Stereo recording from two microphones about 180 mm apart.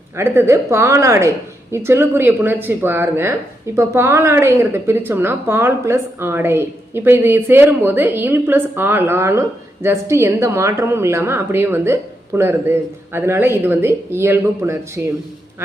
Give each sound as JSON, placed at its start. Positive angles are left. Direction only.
{"t": 0.2, "sound": "a woman's voice", "side_deg": -15}